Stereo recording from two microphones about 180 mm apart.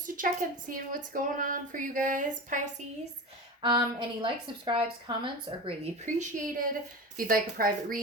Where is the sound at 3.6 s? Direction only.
25° right (ahead or behind).